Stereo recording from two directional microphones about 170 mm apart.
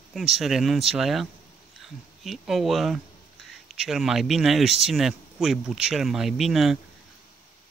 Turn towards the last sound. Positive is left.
turn(degrees=0)  # may be behind; listen again after turning